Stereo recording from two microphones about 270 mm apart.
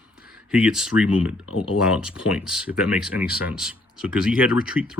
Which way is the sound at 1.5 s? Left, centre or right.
Left.